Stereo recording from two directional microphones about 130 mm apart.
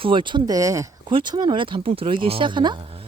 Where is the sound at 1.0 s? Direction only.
35° right (ahead or behind).